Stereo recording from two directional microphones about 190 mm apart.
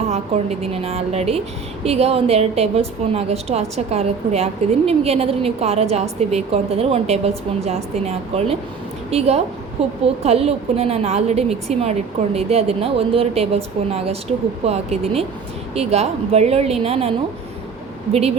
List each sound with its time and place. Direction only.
0.1 s a woman's voice: 35° right (ahead or behind)